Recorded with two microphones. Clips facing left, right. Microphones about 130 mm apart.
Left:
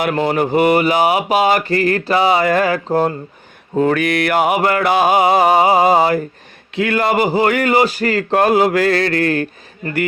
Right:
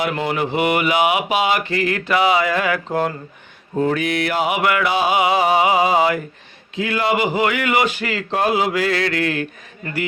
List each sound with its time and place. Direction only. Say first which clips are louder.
0.0 s speech: left 5 dB; 45° left (ahead or behind)
2.7 s speech: left 5 dB; 30° left (ahead or behind)
3.8 s speech: left 4 dB; 70° left (ahead or behind); by 6.2 s 40° left (ahead or behind)
6.7 s speech: left 4 dB; 55° left (ahead or behind)